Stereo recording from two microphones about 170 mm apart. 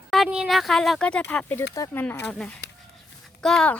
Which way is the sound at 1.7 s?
20° left (ahead or behind).